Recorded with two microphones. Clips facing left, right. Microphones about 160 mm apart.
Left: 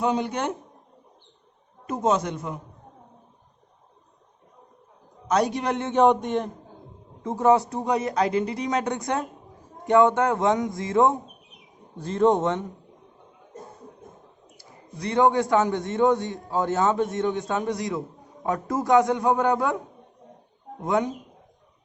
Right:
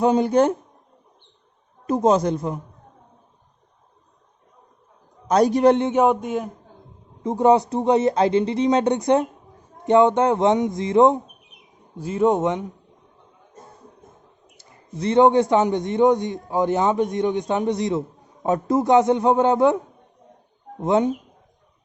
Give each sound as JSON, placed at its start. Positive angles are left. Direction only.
{"t": 0.0, "sound": "a man's voice", "side_deg": -40}
{"t": 1.9, "sound": "a man's voice", "side_deg": -35}
{"t": 5.3, "sound": "a man's voice", "side_deg": -35}
{"t": 5.9, "sound": "speech", "side_deg": -5}
{"t": 7.3, "sound": "a man's voice", "side_deg": -20}
{"t": 11.9, "sound": "a man's voice", "side_deg": -10}
{"t": 14.6, "sound": "a man's voice", "side_deg": -25}
{"t": 20.8, "sound": "a man's voice", "side_deg": -25}